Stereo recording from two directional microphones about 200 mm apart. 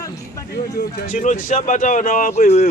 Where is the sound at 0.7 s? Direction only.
50° left (ahead or behind).